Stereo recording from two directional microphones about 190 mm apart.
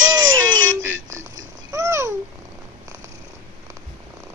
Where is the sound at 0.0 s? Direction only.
20° right (ahead or behind).